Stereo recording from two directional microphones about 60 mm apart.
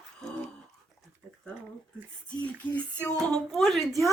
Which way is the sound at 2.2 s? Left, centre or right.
Left.